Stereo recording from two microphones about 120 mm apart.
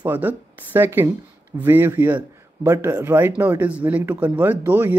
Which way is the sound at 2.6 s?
25° right (ahead or behind).